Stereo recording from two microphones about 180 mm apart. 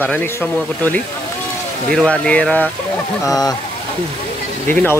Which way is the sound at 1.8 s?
5° left (ahead or behind).